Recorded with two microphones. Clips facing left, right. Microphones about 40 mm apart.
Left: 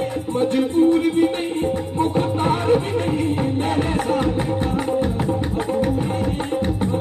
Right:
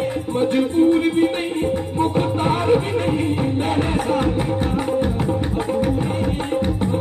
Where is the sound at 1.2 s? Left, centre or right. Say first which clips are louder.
Even; centre.